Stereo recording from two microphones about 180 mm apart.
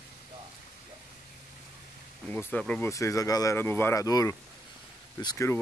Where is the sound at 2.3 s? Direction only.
10° left (ahead or behind).